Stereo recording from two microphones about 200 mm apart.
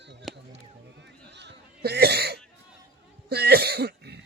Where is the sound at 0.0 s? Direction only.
60° right (ahead or behind).